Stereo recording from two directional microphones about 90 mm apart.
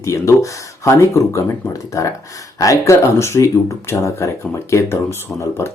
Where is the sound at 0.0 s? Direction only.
35° left (ahead or behind).